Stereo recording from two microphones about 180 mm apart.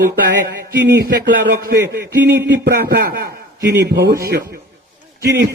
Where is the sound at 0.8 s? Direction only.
65° right (ahead or behind).